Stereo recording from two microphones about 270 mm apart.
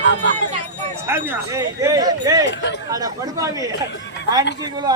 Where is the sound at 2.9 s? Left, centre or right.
Centre.